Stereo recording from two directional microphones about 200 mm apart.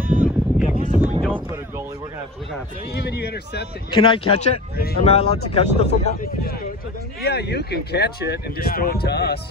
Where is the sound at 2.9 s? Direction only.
55° left (ahead or behind).